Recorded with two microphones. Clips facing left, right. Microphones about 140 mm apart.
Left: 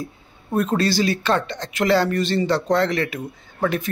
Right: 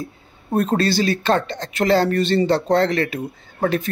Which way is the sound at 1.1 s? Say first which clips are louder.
Right 2 dB; 45° right (ahead or behind).